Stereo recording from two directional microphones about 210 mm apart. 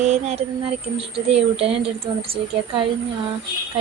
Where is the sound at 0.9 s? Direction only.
25° right (ahead or behind).